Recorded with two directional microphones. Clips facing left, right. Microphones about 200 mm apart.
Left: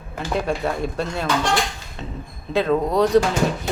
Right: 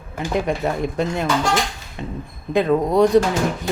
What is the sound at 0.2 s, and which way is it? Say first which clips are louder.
Speech: right 2 dB; 15° right (ahead or behind).